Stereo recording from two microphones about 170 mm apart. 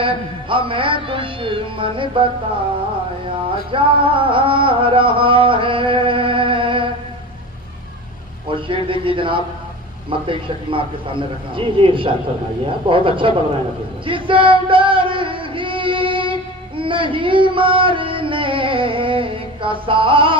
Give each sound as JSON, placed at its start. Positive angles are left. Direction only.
{"t": 0.0, "sound": "a man's voice", "side_deg": -30}
{"t": 3.2, "sound": "music", "side_deg": -30}
{"t": 8.4, "sound": "a man's voice", "side_deg": -30}
{"t": 14.0, "sound": "a sound", "side_deg": -30}